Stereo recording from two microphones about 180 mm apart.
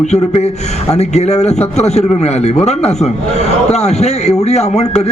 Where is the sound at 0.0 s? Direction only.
35° left (ahead or behind).